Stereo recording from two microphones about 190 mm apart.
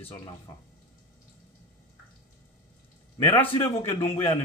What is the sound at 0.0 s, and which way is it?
Speech, 20° left (ahead or behind).